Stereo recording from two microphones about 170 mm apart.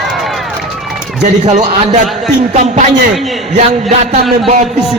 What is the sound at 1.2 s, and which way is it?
A man's voice, 40° right (ahead or behind).